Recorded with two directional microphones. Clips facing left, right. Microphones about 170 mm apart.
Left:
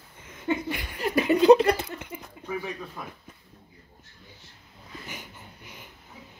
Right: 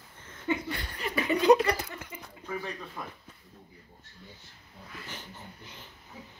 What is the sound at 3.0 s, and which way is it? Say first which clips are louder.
Speech: left 1 dB; 5° left (ahead or behind).